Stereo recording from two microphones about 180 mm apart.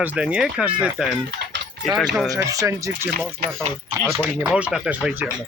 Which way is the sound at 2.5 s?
20° right (ahead or behind).